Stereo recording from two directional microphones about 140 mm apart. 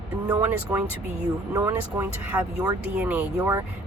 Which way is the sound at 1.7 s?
15° right (ahead or behind).